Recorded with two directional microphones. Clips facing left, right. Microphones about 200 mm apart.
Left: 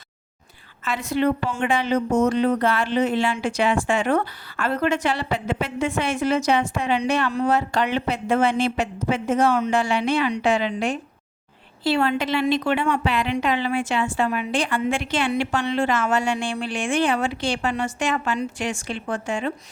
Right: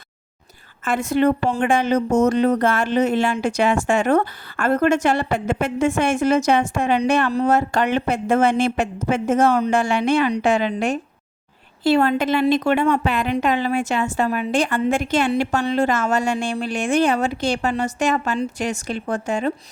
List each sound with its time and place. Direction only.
0.9 s speech: 50° right (ahead or behind)